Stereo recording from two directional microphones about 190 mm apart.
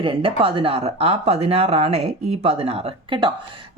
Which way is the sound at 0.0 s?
30° right (ahead or behind).